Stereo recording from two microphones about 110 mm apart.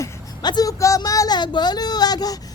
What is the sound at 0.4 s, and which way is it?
Speech, 35° left (ahead or behind).